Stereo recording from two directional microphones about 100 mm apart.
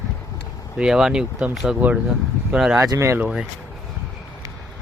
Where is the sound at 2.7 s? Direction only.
30° right (ahead or behind).